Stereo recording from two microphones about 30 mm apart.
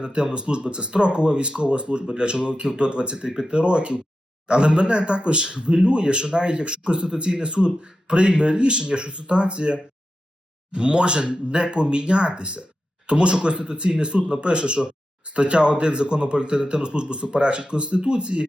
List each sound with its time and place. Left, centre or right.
0.0 s a man's voice: right